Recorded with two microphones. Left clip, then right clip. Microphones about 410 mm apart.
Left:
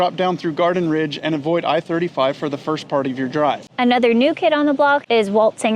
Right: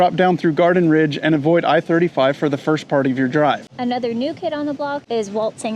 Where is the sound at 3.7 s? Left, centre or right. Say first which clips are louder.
Left 7 dB; left.